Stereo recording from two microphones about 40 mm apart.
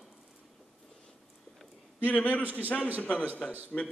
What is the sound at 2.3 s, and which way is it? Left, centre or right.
Speech, right.